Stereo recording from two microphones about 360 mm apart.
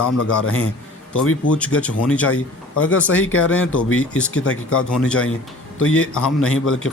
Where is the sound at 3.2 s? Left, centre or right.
Left.